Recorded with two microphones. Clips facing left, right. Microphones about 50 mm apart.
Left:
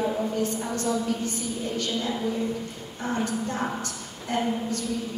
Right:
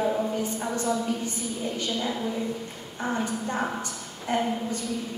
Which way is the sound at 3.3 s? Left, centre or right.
Centre.